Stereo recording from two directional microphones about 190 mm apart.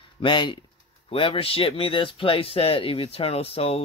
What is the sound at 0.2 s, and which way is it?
Speech, 25° left (ahead or behind).